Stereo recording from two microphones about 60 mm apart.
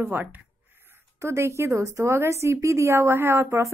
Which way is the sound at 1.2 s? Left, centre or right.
Right.